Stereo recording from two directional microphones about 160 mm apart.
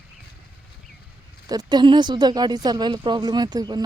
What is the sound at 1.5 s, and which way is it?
A woman's voice, 25° right (ahead or behind).